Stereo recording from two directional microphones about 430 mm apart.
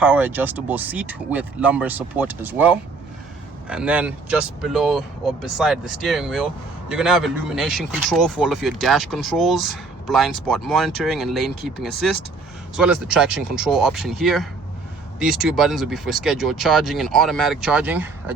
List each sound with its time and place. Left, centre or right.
0.0 s speech: centre